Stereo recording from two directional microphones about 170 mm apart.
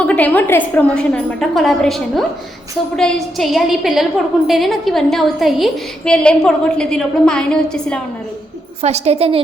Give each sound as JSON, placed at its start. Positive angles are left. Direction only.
{"t": 0.0, "sound": "a woman's voice", "side_deg": 10}
{"t": 8.8, "sound": "a woman's voice", "side_deg": -40}